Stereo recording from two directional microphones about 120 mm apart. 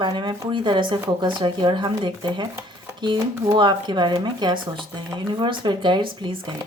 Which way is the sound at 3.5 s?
40° right (ahead or behind).